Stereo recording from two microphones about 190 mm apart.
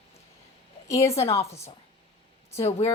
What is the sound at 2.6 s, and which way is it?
Speech, 35° left (ahead or behind).